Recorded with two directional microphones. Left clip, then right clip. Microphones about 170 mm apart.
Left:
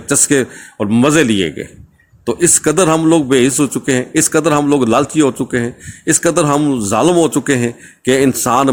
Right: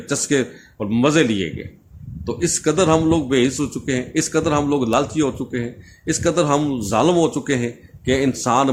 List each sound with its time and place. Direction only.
0.1 s a man's voice: 45° left (ahead or behind)